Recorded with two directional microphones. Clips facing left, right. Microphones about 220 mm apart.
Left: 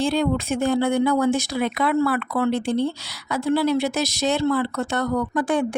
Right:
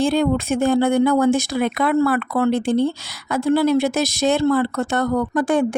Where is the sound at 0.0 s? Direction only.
50° right (ahead or behind).